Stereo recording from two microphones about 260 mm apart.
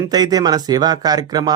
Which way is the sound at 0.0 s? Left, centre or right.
Centre.